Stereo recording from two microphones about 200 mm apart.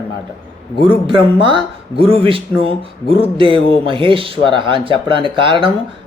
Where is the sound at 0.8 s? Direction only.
25° right (ahead or behind).